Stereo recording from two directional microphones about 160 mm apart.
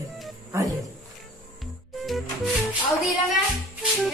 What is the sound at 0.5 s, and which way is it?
Speech, 15° right (ahead or behind).